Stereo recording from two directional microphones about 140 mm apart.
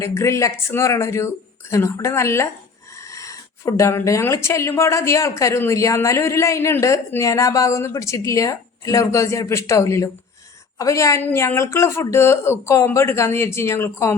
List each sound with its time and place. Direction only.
0.0 s speech: 20° left (ahead or behind)